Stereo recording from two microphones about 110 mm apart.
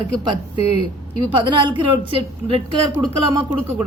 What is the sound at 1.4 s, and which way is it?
A woman's voice, 45° right (ahead or behind).